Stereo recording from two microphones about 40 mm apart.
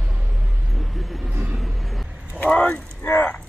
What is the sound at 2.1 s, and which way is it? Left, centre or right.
Vehicle, right.